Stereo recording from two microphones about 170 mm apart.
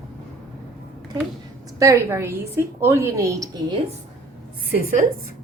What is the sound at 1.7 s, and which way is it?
A woman's voice, 20° right (ahead or behind).